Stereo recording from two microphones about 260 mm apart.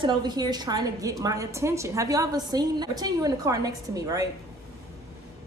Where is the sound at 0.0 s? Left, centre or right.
Centre.